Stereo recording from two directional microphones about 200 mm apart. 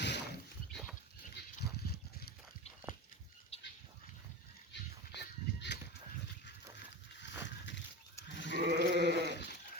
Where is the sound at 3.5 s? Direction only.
30° left (ahead or behind).